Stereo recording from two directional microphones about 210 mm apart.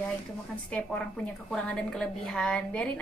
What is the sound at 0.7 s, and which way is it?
A woman's voice, 5° left (ahead or behind).